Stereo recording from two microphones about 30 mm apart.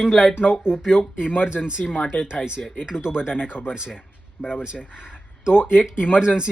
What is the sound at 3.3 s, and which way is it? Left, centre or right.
Speech, left.